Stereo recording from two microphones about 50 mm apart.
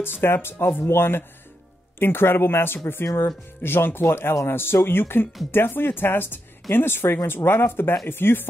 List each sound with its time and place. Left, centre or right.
0.0 s speech: left